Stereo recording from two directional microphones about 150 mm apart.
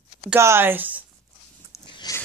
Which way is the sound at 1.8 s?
30° left (ahead or behind).